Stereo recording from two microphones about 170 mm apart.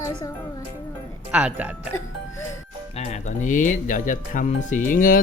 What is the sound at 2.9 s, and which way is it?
Speech, 45° left (ahead or behind).